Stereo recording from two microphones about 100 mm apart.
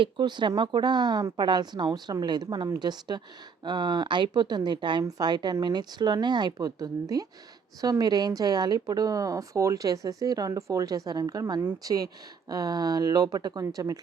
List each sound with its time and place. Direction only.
0.0 s speech: 50° right (ahead or behind)
5.0 s a woman's voice: 40° right (ahead or behind)